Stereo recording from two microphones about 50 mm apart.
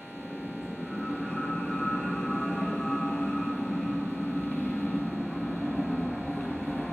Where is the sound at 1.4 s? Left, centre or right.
Centre.